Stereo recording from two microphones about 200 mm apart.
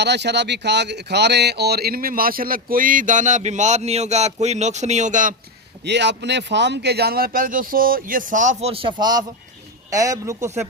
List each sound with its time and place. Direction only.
0.0 s speech: 60° right (ahead or behind); by 5.3 s 40° right (ahead or behind)
5.8 s a man's voice: 60° right (ahead or behind); by 10.7 s 15° right (ahead or behind)